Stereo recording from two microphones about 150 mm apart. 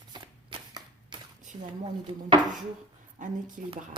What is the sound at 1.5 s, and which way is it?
Speech, 30° right (ahead or behind).